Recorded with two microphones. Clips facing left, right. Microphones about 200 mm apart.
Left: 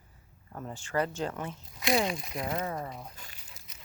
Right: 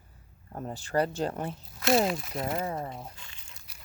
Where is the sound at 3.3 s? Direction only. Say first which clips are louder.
Left 1 dB; 5° left (ahead or behind).